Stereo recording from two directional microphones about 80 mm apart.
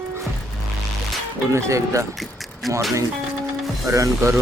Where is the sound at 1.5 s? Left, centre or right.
Right.